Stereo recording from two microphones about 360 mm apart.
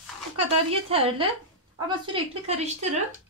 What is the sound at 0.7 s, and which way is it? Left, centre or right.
Speech, centre.